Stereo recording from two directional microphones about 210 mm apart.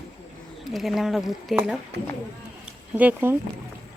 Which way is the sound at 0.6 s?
Centre (ahead or behind).